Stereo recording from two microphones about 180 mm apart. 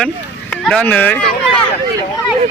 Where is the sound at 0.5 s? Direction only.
5° left (ahead or behind).